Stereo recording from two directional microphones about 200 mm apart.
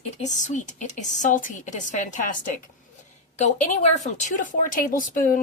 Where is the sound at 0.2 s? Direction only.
35° left (ahead or behind).